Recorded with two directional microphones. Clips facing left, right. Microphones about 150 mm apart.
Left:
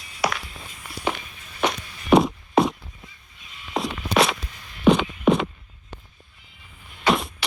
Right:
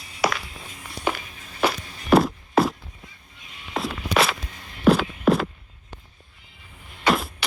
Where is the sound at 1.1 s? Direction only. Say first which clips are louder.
Right 1 dB; 5° right (ahead or behind).